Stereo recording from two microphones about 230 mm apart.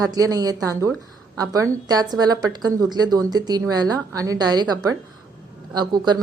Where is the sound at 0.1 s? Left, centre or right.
Centre.